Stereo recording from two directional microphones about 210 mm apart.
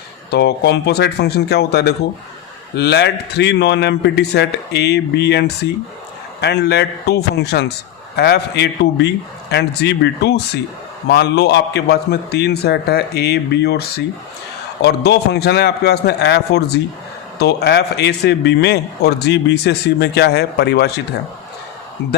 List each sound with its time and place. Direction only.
0.3 s a man's voice: 50° left (ahead or behind)